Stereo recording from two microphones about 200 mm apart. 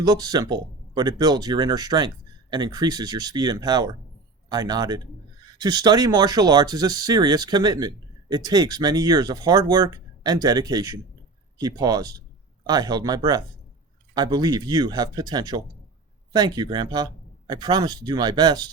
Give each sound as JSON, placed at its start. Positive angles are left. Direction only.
{"t": 0.0, "sound": "speech", "side_deg": -20}